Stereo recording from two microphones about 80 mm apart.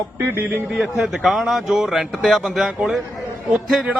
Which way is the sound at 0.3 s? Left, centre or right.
Right.